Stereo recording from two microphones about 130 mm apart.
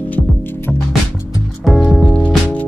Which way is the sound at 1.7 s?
Centre (ahead or behind).